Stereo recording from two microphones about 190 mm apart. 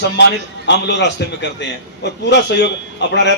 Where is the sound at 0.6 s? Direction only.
65° left (ahead or behind).